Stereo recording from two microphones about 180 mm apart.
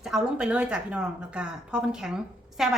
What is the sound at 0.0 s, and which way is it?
Speech, 5° right (ahead or behind).